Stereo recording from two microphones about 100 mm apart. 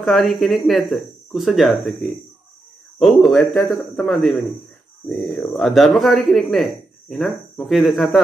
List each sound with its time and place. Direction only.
0.0 s speech: centre (ahead or behind)